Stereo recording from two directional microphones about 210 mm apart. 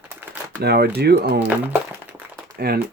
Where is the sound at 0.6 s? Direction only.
50° right (ahead or behind).